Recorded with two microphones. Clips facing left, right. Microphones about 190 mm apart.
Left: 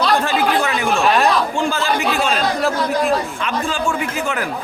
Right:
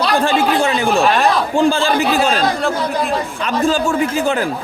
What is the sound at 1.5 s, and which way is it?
Chatter, 30° right (ahead or behind).